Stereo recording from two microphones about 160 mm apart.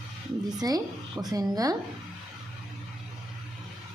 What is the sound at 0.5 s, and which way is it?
A woman's voice, 25° right (ahead or behind).